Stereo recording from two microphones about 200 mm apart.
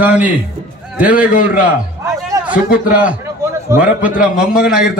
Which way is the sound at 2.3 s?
15° right (ahead or behind).